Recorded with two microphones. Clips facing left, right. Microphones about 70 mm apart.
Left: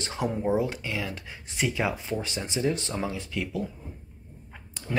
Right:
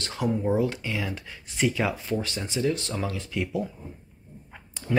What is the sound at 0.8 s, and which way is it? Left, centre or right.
Speech, centre.